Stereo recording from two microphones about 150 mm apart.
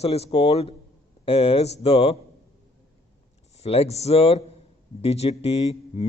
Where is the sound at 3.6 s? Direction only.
45° left (ahead or behind).